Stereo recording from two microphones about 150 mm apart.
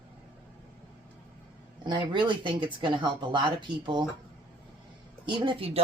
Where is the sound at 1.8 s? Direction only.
30° right (ahead or behind).